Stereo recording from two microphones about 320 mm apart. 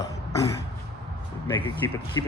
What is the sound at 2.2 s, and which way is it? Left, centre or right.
Speech, centre.